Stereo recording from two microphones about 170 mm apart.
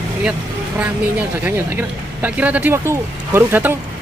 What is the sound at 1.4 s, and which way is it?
Speech, 10° right (ahead or behind).